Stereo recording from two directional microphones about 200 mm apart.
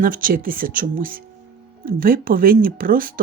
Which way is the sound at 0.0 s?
45° right (ahead or behind).